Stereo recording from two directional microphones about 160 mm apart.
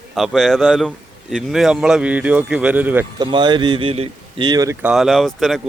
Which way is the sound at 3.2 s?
30° right (ahead or behind).